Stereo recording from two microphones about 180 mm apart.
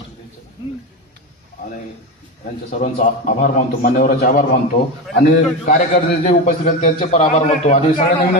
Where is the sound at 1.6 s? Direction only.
55° left (ahead or behind).